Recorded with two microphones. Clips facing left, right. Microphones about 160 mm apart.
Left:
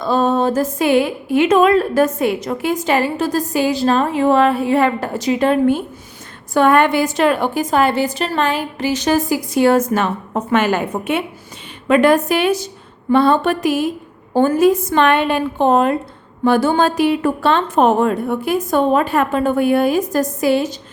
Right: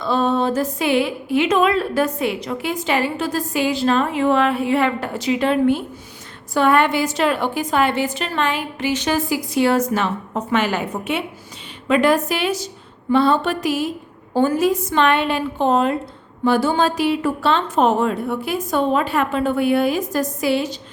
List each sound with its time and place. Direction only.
0.0 s a woman's voice: 45° left (ahead or behind)